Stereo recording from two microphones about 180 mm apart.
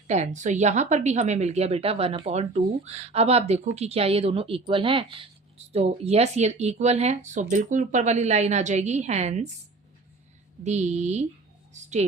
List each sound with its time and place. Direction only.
0.1 s speech: 40° right (ahead or behind)
10.6 s a woman's voice: 40° right (ahead or behind)